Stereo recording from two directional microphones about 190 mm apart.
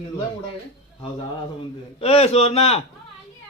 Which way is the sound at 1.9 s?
30° left (ahead or behind).